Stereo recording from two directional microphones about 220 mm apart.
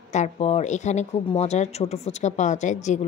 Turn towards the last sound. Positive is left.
turn(degrees=35)  # may be behind; listen again after turning